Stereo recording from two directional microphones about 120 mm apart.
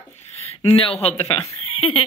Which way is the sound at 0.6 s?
50° left (ahead or behind).